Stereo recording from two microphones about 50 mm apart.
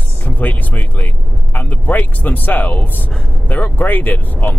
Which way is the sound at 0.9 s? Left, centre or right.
Left.